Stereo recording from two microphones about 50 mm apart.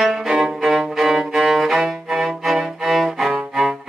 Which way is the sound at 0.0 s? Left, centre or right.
Centre.